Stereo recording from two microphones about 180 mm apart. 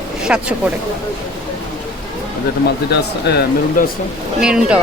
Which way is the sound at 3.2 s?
65° left (ahead or behind).